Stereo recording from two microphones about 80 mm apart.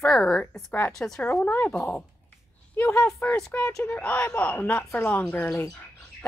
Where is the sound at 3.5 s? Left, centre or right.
Centre.